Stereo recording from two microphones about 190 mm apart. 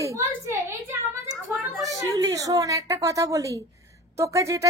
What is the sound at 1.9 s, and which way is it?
A woman's voice, 15° right (ahead or behind).